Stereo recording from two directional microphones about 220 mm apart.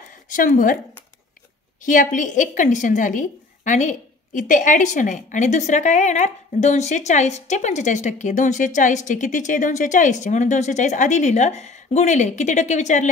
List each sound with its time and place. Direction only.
0.3 s a woman's voice: 35° left (ahead or behind)
1.8 s a woman's voice: 35° left (ahead or behind)